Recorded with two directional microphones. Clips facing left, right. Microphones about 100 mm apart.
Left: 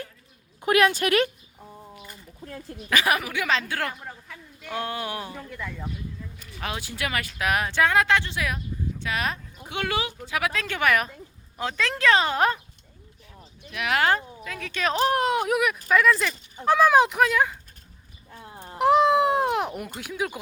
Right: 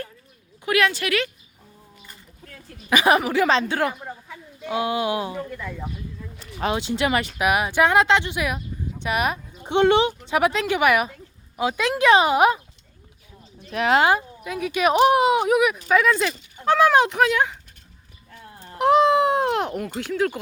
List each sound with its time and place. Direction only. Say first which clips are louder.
0.6 s a woman's voice: left 1 dB; 40° left (ahead or behind)
2.4 s a sound: left 8 dB; 30° left (ahead or behind)
2.9 s speech: right 6 dB; 20° right (ahead or behind); by 5.8 s 5° right (ahead or behind)
6.4 s speech: right 9 dB; 25° right (ahead or behind)
7.3 s speech: right 1 dB; 10° right (ahead or behind)
13.7 s speech: right 7 dB; 35° right (ahead or behind)
14.0 s speech: right 4 dB; 15° right (ahead or behind); by 17.6 s centre (ahead or behind)
18.3 s a sound: left 1 dB; 20° left (ahead or behind)
18.8 s a sound: right 2 dB; centre (ahead or behind)